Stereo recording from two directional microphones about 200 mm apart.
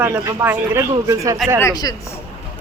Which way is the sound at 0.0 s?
10° right (ahead or behind).